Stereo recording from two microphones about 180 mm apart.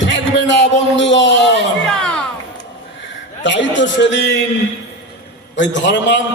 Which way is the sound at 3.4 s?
85° left.